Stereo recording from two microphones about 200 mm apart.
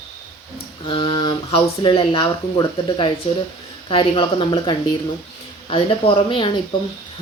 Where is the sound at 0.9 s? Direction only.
25° left (ahead or behind).